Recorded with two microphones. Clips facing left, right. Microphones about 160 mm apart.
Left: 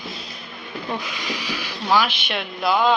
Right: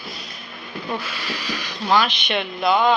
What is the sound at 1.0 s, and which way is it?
A woman's voice, 15° left (ahead or behind).